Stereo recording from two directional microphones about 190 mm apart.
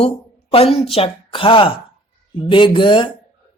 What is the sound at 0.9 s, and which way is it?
Speech, 30° left (ahead or behind).